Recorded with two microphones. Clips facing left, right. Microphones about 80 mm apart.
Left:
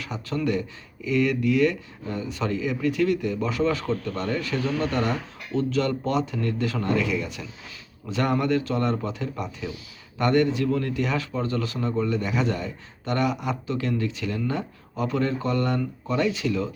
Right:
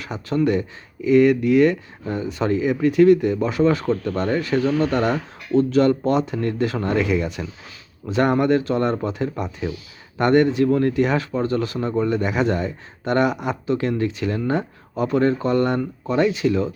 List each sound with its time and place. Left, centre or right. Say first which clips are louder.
0.0 s speech: right 6 dB; right